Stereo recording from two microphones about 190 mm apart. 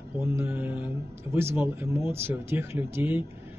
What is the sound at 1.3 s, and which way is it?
Speech, 10° right (ahead or behind).